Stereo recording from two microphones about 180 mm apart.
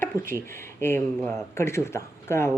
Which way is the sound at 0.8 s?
15° left (ahead or behind).